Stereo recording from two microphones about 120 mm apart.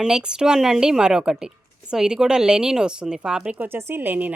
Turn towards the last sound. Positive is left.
turn(degrees=-15)  # may be behind; listen again after turning